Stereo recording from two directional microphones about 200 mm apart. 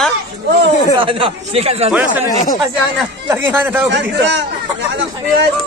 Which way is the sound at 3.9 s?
60° right (ahead or behind).